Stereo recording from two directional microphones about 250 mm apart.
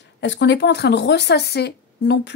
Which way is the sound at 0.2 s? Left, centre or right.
Left.